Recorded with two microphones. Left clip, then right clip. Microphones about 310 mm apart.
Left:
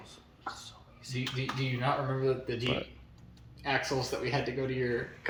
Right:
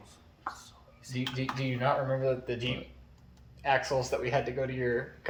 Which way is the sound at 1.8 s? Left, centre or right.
Centre.